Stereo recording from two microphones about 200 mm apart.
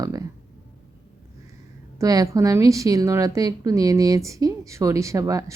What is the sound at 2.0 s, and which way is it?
A woman's voice, 15° right (ahead or behind).